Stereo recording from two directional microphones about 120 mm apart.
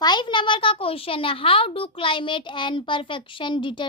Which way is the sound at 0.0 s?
40° left (ahead or behind).